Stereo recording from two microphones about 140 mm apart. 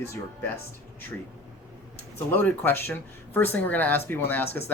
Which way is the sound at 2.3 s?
10° left (ahead or behind).